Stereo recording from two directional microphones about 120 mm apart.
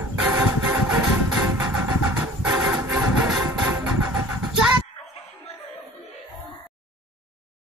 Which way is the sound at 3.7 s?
15° right (ahead or behind).